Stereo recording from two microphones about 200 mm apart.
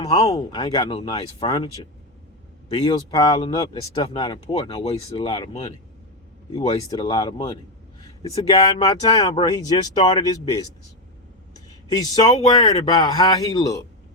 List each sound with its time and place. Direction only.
0.0 s speech: 15° left (ahead or behind)
10.0 s speech: 35° left (ahead or behind)
10.2 s speech: 20° left (ahead or behind)
11.9 s speech: 20° left (ahead or behind)